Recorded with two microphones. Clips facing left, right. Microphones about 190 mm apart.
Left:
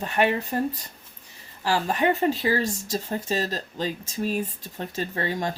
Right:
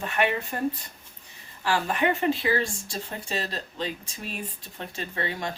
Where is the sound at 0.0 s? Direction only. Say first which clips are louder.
Left 3 dB; 35° left (ahead or behind).